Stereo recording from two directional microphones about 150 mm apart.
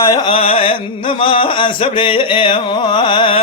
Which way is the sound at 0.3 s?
40° left (ahead or behind).